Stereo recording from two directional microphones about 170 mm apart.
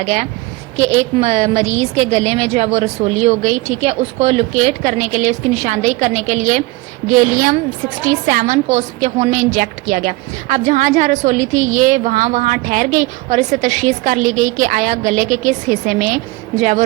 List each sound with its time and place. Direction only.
0.0 s a woman's voice: 45° right (ahead or behind)